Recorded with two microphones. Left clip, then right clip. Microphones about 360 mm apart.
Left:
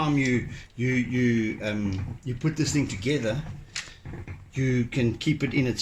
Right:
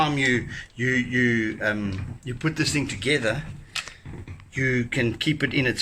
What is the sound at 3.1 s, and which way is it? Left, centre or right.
Speech, right.